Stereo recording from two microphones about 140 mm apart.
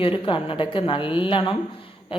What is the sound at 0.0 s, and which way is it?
A woman's voice, 40° left (ahead or behind).